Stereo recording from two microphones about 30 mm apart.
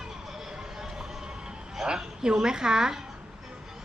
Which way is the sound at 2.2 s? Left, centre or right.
Right.